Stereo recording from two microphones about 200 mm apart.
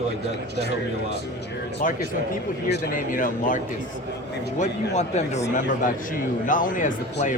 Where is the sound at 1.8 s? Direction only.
45° left (ahead or behind).